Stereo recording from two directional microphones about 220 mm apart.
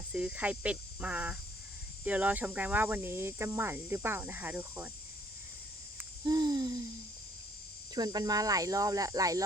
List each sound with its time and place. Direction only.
0.1 s speech: 5° right (ahead or behind)
6.0 s hoot: 20° right (ahead or behind)
7.9 s speech: 20° right (ahead or behind)